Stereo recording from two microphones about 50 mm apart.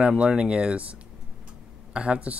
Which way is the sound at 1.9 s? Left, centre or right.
Right.